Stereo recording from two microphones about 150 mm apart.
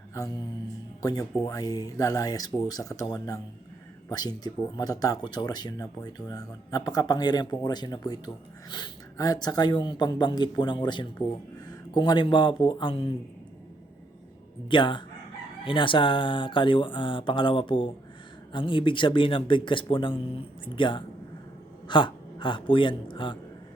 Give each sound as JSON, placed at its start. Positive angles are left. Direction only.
{"t": 0.1, "sound": "mantra", "side_deg": 20}
{"t": 1.0, "sound": "speech", "side_deg": 25}
{"t": 14.7, "sound": "a man's voice", "side_deg": 30}